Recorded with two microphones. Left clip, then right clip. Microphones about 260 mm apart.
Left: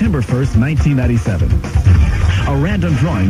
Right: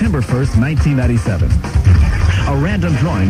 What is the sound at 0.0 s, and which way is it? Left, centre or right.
Speech, left.